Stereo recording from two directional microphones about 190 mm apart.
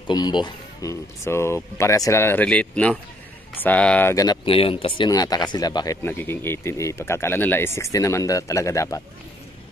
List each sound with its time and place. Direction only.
0.1 s speech: 25° left (ahead or behind); by 4.1 s 5° left (ahead or behind)
4.1 s speech: 20° left (ahead or behind)
4.5 s speech: 30° left (ahead or behind)